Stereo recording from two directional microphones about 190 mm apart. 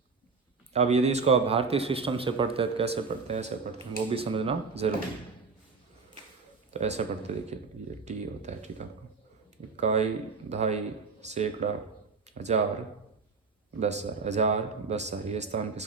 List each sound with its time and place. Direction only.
0.7 s a man's voice: 35° right (ahead or behind)
6.7 s a man's voice: 35° right (ahead or behind)
9.7 s a man's voice: 35° right (ahead or behind)
13.7 s a man's voice: 35° right (ahead or behind)